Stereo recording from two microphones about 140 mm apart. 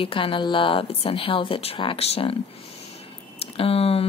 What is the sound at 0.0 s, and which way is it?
A woman's voice, 40° left (ahead or behind).